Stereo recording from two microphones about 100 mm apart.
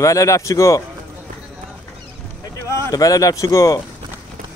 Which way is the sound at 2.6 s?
30° left (ahead or behind).